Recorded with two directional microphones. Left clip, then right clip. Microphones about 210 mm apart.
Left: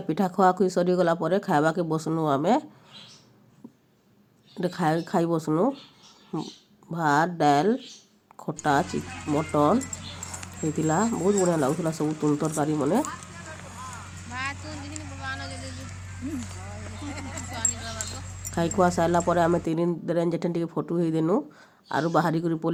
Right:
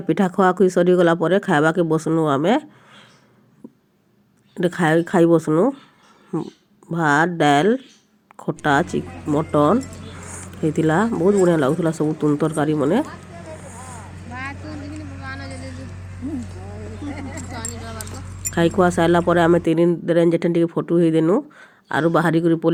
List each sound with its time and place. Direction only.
0.1 s speech: 20° right (ahead or behind)
4.5 s speech: 20° right (ahead or behind)
14.3 s vehicle: 50° left (ahead or behind)
15.2 s a sound: 30° left (ahead or behind)
18.5 s speech: 15° right (ahead or behind)